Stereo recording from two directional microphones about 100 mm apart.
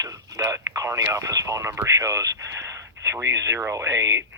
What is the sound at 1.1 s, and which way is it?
Speech, 35° right (ahead or behind).